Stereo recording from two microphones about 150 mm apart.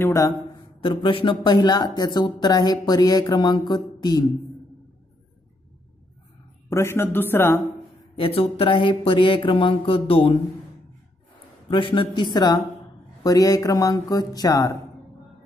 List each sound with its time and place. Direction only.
0.0 s speech: 20° left (ahead or behind)
0.8 s speech: 35° left (ahead or behind)
6.7 s a man's voice: 15° left (ahead or behind)
8.2 s speech: 40° left (ahead or behind)
11.7 s speech: 30° left (ahead or behind)